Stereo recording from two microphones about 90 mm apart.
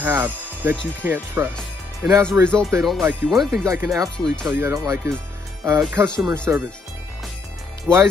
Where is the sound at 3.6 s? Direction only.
35° right (ahead or behind).